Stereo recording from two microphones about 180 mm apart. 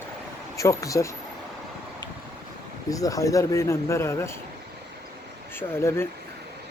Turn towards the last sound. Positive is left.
turn(degrees=15)  # may be behind; listen again after turning